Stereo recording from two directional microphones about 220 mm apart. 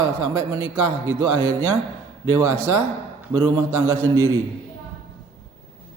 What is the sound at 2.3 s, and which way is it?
A man's voice, 15° right (ahead or behind).